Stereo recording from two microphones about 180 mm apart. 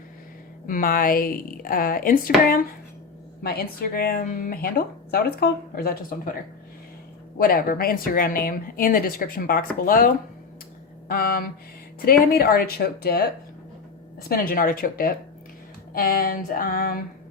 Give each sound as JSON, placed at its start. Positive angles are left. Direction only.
{"t": 0.7, "sound": "a woman's voice", "side_deg": 50}
{"t": 3.4, "sound": "speech", "side_deg": 60}
{"t": 7.3, "sound": "a woman's voice", "side_deg": 55}
{"t": 11.1, "sound": "a woman's voice", "side_deg": 55}